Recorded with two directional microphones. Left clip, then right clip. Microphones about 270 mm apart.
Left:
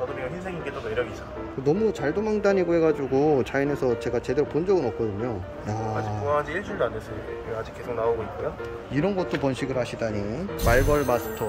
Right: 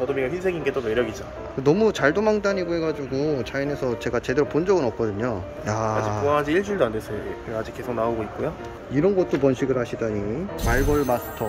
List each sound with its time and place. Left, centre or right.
1.6 s speech: centre
6.2 s speech: right
8.9 s speech: centre